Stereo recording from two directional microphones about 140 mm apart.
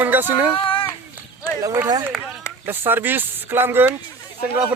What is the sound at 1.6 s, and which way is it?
Speech, 25° right (ahead or behind).